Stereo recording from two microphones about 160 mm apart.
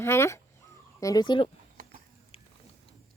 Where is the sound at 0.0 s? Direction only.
15° left (ahead or behind).